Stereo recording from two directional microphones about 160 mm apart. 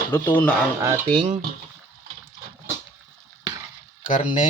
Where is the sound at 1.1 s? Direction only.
35° right (ahead or behind).